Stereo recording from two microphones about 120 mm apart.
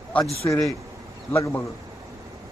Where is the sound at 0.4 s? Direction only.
20° left (ahead or behind).